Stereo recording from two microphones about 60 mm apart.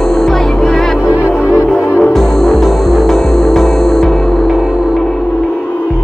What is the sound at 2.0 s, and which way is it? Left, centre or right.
Music, centre.